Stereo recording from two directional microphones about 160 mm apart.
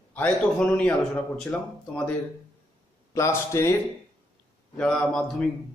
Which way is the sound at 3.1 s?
20° left (ahead or behind).